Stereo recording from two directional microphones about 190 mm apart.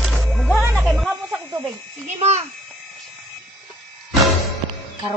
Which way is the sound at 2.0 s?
35° right (ahead or behind).